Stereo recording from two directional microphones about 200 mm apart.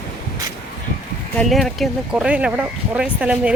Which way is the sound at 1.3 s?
Centre (ahead or behind).